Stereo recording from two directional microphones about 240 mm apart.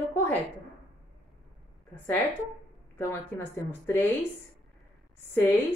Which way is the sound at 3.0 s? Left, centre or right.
Centre.